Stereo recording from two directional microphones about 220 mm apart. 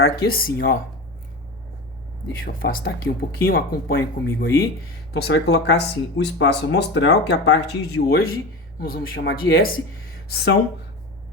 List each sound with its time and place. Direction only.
0.0 s speech: 40° left (ahead or behind)
2.4 s speech: 40° left (ahead or behind)
10.1 s a sound: 45° left (ahead or behind)